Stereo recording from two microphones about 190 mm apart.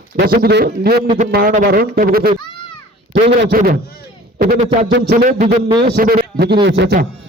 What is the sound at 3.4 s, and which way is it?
Speech, 50° right (ahead or behind).